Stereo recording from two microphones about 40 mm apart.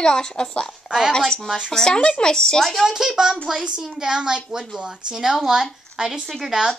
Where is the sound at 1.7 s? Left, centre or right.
Centre.